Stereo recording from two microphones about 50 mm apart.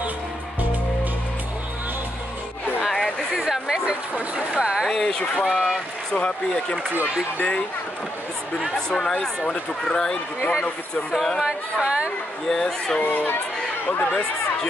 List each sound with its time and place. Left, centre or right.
2.8 s a sound: centre
3.4 s chatter: centre
4.6 s a sound: centre
4.8 s speech: centre
5.1 s speech: left
5.5 s speech: centre
6.1 s speech: left
7.3 s speech: left
8.7 s speech: centre
11.4 s speech: right
12.4 s speech: centre
14.0 s speech: centre